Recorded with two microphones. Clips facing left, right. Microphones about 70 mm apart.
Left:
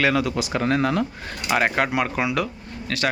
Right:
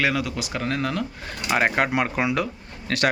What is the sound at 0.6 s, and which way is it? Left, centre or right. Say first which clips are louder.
Speech: left 5 dB; centre.